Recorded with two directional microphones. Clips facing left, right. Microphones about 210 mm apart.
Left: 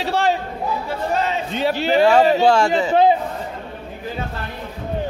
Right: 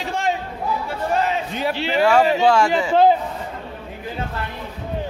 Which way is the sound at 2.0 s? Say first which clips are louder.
Left 2 dB; 30° left (ahead or behind).